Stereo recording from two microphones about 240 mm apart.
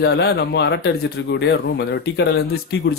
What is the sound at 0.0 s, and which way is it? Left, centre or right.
Speech, left.